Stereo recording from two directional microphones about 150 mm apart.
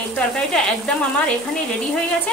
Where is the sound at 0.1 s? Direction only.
5° left (ahead or behind).